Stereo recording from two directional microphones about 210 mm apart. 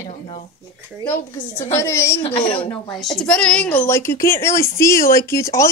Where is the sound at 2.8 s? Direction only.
Centre (ahead or behind).